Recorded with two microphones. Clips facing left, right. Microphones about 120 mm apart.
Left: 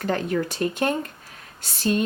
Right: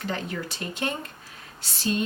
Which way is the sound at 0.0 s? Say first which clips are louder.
Left 7 dB; 50° left (ahead or behind).